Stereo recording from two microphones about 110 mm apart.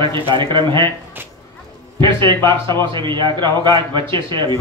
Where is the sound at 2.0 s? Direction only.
45° right (ahead or behind).